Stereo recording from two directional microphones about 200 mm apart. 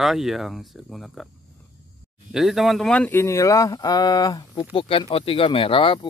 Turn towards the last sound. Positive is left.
turn(degrees=25)  # may be behind; listen again after turning